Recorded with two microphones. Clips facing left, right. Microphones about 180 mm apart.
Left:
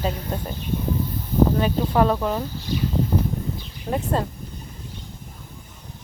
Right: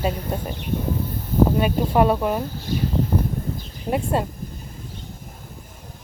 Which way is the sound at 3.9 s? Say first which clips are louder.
Right 1 dB; 10° right (ahead or behind).